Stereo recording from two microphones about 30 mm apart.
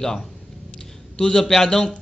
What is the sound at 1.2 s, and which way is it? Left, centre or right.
Speech, left.